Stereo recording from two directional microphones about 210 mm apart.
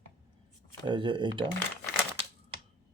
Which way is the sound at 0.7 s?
20° right (ahead or behind).